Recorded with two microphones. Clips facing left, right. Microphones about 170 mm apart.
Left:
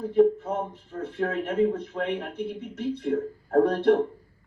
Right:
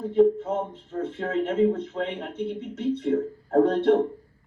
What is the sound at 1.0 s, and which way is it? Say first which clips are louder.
Speech: right 1 dB; 20° right (ahead or behind).